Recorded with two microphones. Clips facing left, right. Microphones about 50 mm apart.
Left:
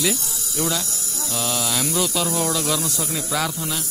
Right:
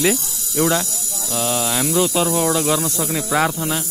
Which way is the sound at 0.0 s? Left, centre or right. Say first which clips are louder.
Right 5 dB; right.